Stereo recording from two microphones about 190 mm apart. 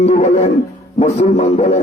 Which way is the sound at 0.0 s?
35° left (ahead or behind).